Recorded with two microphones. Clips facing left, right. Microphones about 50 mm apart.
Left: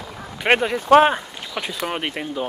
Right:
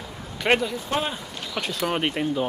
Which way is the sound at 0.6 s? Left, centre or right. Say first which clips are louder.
Left 13 dB; left.